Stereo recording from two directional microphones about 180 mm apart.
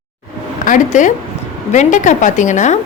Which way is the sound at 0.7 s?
45° left (ahead or behind).